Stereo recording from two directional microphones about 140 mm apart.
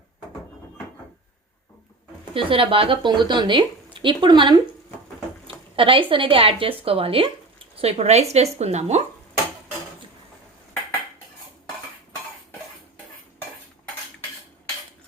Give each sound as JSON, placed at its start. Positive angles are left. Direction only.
{"t": 2.3, "sound": "speech", "side_deg": -40}
{"t": 5.7, "sound": "a woman's voice", "side_deg": -40}